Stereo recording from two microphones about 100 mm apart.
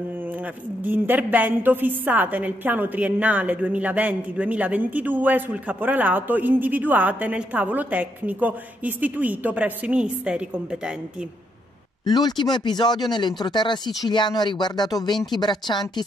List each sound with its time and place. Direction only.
0.8 s a woman's voice: 20° right (ahead or behind)
12.0 s speech: 45° left (ahead or behind)